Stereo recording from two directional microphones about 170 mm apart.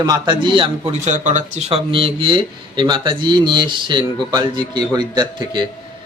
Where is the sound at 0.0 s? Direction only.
25° right (ahead or behind).